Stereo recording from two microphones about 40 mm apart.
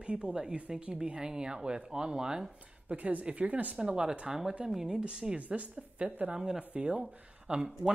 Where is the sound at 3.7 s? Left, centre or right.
Right.